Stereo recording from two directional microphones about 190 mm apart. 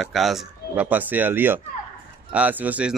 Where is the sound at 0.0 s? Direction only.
Centre (ahead or behind).